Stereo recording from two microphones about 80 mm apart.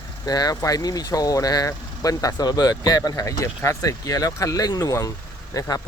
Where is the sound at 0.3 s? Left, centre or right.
Left.